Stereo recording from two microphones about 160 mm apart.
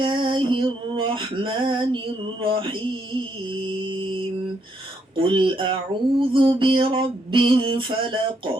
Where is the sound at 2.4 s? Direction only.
30° right (ahead or behind).